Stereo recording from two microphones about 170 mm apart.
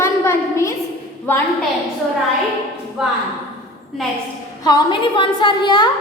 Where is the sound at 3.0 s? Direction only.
5° right (ahead or behind).